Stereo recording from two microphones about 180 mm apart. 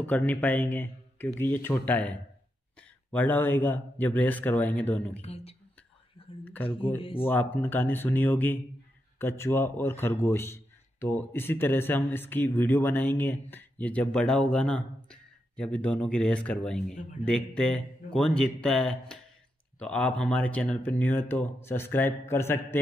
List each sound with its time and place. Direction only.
0.0 s a man's voice: 10° left (ahead or behind)
5.2 s speech: 35° left (ahead or behind)
6.4 s speech: 10° left (ahead or behind)
7.0 s speech: 30° left (ahead or behind)
7.2 s a man's voice: 10° left (ahead or behind)
16.9 s speech: 45° left (ahead or behind)
17.6 s a man's voice: 5° left (ahead or behind)